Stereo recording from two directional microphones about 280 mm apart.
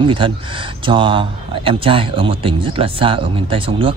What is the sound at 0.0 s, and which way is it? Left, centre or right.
Speech, centre.